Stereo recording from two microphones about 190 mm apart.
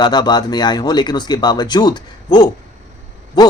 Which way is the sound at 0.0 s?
20° left (ahead or behind).